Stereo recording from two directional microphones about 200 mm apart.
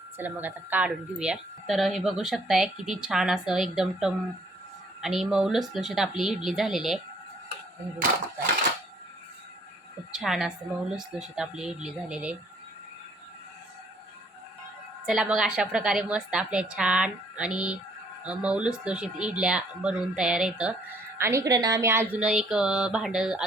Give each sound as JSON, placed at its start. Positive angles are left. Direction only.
{"t": 0.2, "sound": "speech", "side_deg": -10}
{"t": 10.1, "sound": "speech", "side_deg": 0}
{"t": 15.0, "sound": "speech", "side_deg": -5}